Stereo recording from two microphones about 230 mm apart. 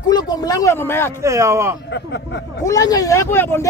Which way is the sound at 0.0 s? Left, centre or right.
Centre.